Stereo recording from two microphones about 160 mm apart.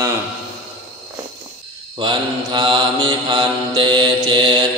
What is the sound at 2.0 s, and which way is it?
Mantra, 30° right (ahead or behind).